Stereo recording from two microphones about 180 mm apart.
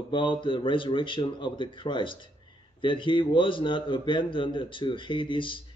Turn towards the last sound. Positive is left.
turn(degrees=25)  # may be behind; listen again after turning